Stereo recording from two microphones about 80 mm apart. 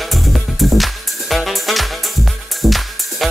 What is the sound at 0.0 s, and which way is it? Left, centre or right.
Music, centre.